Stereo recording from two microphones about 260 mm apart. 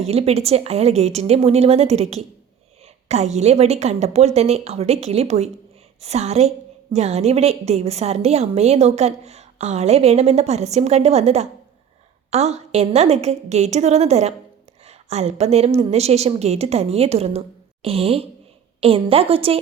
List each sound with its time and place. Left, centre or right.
0.0 s a woman's voice: right